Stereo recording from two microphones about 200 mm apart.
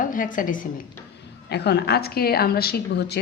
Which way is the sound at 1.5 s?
55° left (ahead or behind).